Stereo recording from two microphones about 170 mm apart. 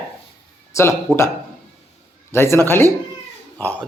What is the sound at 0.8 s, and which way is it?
Speech, 15° left (ahead or behind).